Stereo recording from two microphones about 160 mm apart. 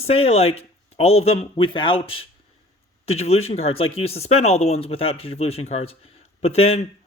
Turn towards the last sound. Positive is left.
turn(degrees=40)  # may be behind; listen again after turning